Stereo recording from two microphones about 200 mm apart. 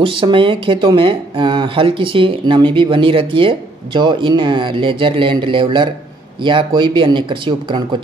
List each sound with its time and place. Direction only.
0.0 s speech: 25° right (ahead or behind)